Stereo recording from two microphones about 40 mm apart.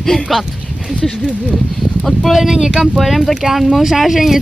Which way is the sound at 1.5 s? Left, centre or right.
Centre.